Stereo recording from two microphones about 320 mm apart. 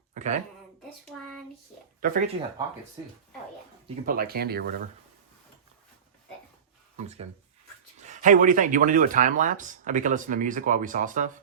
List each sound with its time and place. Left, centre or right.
0.1 s a sound: right
2.0 s speech: right
3.8 s speech: right
6.9 s speech: centre